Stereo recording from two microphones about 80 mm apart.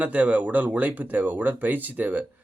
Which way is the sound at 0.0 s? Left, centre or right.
Centre.